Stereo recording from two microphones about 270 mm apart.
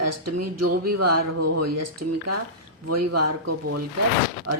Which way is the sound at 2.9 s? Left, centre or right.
Right.